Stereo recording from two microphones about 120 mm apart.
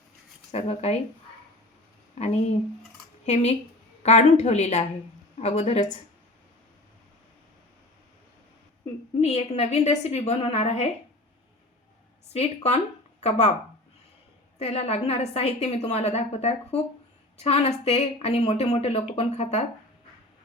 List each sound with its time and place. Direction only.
0.5 s a woman's voice: 60° left (ahead or behind)
2.1 s speech: 65° left (ahead or behind)
4.0 s a woman's voice: 70° left (ahead or behind)
5.4 s a woman's voice: 65° left (ahead or behind)
9.2 s a woman's voice: 60° left (ahead or behind)
12.3 s speech: 60° left (ahead or behind)
14.6 s a woman's voice: 55° left (ahead or behind)